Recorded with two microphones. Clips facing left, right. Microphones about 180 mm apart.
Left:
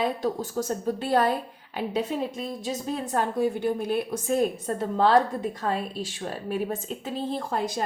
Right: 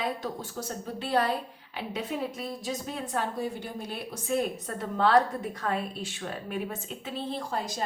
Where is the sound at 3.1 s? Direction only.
50° left (ahead or behind).